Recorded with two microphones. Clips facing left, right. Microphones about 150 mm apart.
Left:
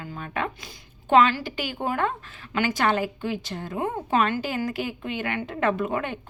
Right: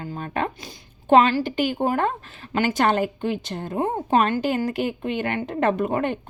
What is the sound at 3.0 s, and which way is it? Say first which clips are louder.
Speech: right 4 dB; 55° right (ahead or behind).